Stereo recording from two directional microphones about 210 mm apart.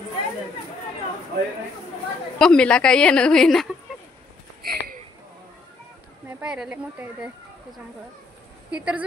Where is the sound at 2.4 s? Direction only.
5° left (ahead or behind).